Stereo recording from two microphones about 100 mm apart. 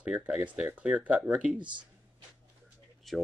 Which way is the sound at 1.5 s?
50° right (ahead or behind).